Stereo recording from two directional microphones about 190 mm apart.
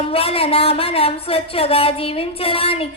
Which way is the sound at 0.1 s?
30° left (ahead or behind).